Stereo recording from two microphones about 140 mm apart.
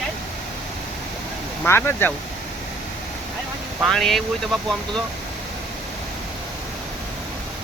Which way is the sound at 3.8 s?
5° left (ahead or behind).